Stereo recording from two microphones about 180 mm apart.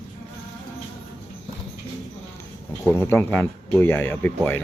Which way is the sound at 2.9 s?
15° left (ahead or behind).